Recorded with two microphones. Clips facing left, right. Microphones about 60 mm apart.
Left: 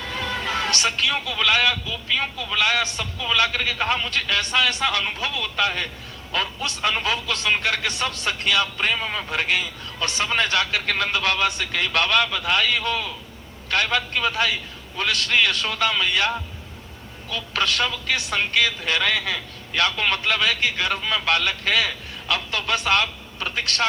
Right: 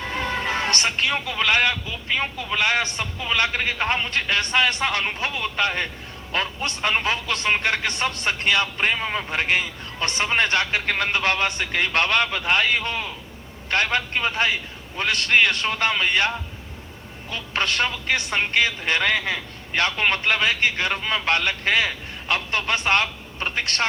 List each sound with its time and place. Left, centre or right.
0.0 s a man's voice: right